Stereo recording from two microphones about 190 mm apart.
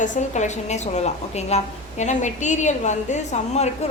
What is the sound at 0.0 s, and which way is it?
A woman's voice, 40° left (ahead or behind).